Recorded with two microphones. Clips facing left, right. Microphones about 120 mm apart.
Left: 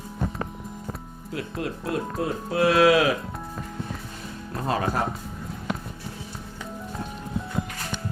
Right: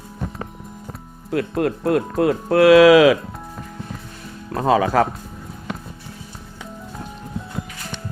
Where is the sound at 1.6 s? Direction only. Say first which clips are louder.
Right 8 dB; 60° right (ahead or behind); by 3.1 s 90° right.